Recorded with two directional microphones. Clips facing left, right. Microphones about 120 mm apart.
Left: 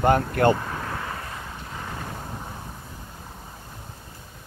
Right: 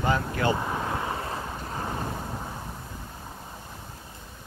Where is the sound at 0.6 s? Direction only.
20° right (ahead or behind).